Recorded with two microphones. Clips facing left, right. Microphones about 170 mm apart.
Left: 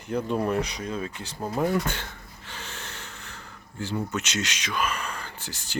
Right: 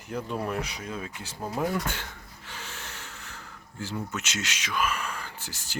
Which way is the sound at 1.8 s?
10° right (ahead or behind).